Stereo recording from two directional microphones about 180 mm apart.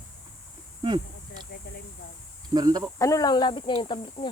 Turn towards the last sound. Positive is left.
turn(degrees=25)  # may be behind; listen again after turning